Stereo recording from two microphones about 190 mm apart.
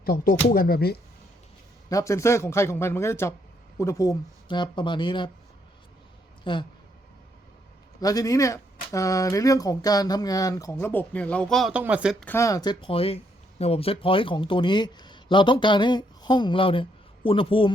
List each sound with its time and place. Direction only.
0.0 s speech: 50° left (ahead or behind)
1.9 s speech: 15° left (ahead or behind)
6.4 s speech: 25° left (ahead or behind)
8.0 s speech: 20° left (ahead or behind); by 12.1 s 5° right (ahead or behind)
12.2 s speech: 15° left (ahead or behind)